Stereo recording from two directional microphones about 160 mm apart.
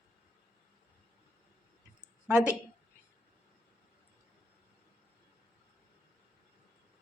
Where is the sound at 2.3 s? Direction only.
5° right (ahead or behind).